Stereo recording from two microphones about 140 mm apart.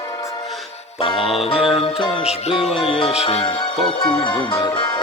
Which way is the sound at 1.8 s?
45° left (ahead or behind).